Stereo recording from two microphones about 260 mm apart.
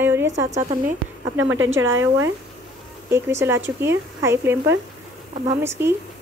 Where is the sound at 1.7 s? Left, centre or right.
Centre.